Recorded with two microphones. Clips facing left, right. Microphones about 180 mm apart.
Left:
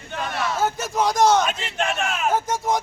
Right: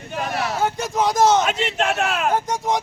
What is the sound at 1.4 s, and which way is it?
Speech, 75° right (ahead or behind).